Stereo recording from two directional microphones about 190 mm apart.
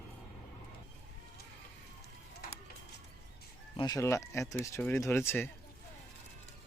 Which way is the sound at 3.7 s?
20° left (ahead or behind).